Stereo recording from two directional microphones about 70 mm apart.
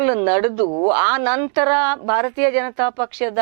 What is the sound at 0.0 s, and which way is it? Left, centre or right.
Speech, centre.